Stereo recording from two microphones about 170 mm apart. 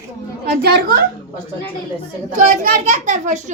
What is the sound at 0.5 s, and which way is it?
Speech, 70° right (ahead or behind).